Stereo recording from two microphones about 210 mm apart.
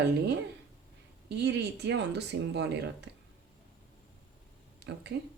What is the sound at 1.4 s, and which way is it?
Speech, 55° right (ahead or behind).